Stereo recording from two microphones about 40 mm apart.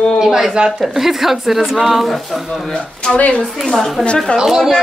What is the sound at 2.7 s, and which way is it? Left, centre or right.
Speech, left.